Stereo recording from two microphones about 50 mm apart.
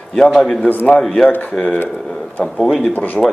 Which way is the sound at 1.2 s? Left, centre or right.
Left.